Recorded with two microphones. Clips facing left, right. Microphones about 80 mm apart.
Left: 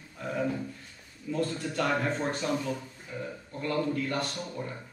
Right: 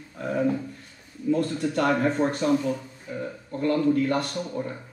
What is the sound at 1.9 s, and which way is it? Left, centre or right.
Speech, centre.